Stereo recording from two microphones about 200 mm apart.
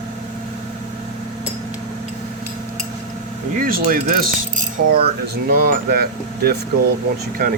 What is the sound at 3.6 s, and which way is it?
Speech, 45° right (ahead or behind).